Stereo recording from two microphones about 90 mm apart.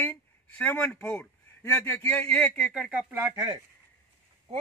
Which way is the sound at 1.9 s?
20° left (ahead or behind).